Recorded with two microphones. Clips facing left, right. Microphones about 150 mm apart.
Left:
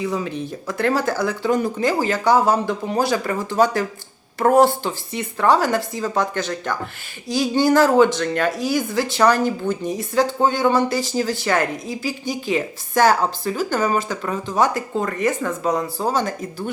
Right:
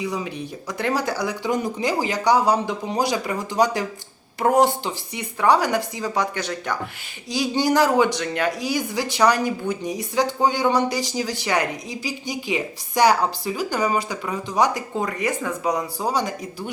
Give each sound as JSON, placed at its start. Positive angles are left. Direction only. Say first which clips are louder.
{"t": 0.0, "sound": "speech", "louder": "left 3 dB", "side_deg": -15}